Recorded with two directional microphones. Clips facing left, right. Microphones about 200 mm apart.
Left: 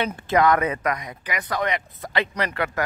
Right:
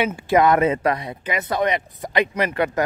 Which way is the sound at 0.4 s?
25° right (ahead or behind).